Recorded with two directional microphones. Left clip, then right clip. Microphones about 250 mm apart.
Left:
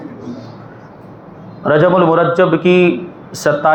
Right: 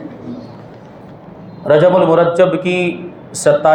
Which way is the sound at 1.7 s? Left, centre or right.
Left.